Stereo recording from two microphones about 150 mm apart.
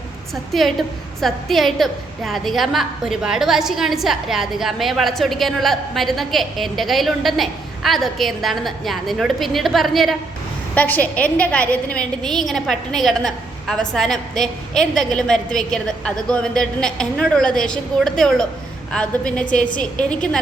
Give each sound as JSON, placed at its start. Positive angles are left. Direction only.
{"t": 0.5, "sound": "a woman's voice", "side_deg": 0}
{"t": 10.8, "sound": "a woman's voice", "side_deg": 10}